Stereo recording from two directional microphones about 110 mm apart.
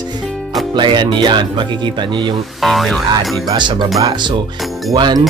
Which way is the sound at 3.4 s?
45° right (ahead or behind).